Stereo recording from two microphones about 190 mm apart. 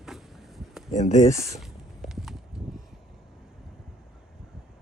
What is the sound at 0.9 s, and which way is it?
Speech, 40° left (ahead or behind).